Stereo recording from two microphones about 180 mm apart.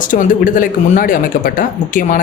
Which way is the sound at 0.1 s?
45° left (ahead or behind).